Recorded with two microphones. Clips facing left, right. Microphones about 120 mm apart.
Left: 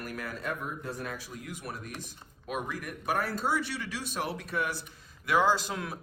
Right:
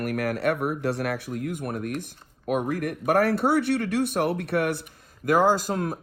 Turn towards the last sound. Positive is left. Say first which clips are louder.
# right 6 dB
turn(degrees=-45)  # may be behind; listen again after turning